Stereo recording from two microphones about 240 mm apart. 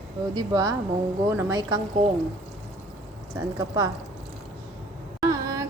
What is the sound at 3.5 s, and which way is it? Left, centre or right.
Speech, centre.